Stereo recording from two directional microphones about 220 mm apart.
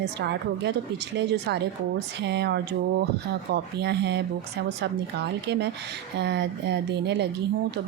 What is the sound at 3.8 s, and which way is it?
Speech, 50° right (ahead or behind).